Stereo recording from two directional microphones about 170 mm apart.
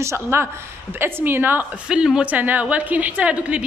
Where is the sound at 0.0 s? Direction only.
15° right (ahead or behind).